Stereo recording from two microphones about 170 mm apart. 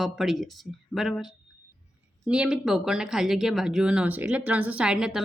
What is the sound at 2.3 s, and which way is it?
A woman's voice, 5° right (ahead or behind).